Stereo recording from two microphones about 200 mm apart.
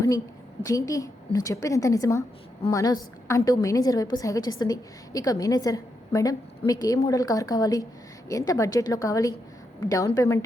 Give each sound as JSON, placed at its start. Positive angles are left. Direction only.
{"t": 0.6, "sound": "a woman's voice", "side_deg": 15}